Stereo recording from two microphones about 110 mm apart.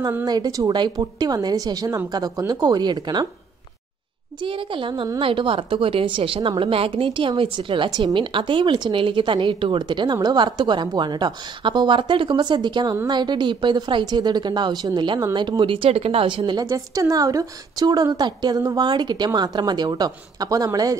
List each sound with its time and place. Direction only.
0.2 s a woman's voice: 35° right (ahead or behind)
4.4 s a woman's voice: 50° right (ahead or behind)
16.6 s a woman's voice: 30° right (ahead or behind)